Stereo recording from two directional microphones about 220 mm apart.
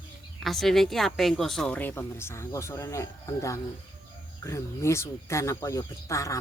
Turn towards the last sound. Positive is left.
turn(degrees=15)  # may be behind; listen again after turning